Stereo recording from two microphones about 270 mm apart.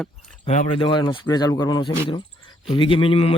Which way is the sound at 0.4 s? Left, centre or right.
Left.